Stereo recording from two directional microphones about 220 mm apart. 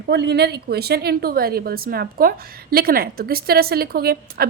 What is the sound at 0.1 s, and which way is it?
A woman's voice, 50° right (ahead or behind).